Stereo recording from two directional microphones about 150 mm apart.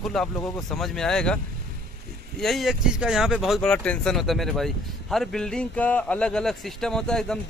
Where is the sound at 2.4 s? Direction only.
Centre (ahead or behind).